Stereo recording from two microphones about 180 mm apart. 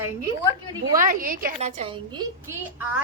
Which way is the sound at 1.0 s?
50° right (ahead or behind).